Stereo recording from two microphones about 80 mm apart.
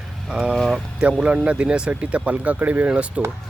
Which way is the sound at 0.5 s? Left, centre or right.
Centre.